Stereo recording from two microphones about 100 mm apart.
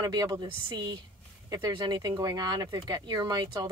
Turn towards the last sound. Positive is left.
turn(degrees=-45)  # may be behind; listen again after turning